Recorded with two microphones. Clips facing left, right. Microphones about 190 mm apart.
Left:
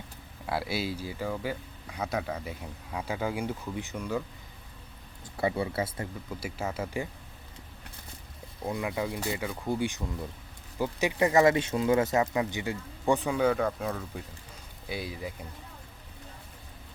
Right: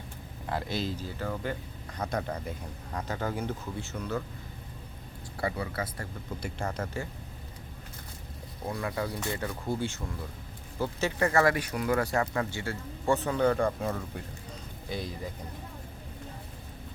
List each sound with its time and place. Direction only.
0.4 s speech: 10° left (ahead or behind)
5.4 s speech: 20° left (ahead or behind)
6.4 s speech: 5° left (ahead or behind)
8.6 s speech: 20° left (ahead or behind)